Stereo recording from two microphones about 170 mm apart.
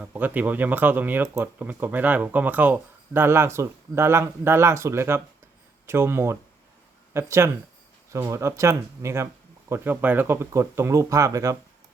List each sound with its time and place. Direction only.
0.0 s speech: 10° right (ahead or behind)